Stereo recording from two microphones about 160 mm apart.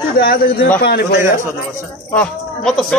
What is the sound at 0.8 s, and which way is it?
Speech, 85° left.